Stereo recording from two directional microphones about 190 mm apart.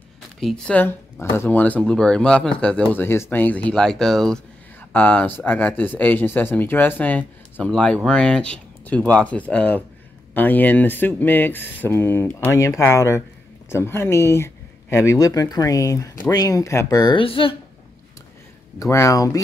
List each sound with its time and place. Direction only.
0.4 s speech: 5° left (ahead or behind); by 17.6 s 30° left (ahead or behind)
18.8 s speech: 15° left (ahead or behind)